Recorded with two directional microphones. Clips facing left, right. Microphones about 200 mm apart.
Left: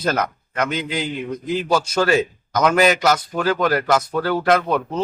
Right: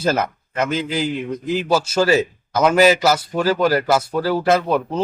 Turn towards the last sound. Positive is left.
turn(degrees=-5)  # may be behind; listen again after turning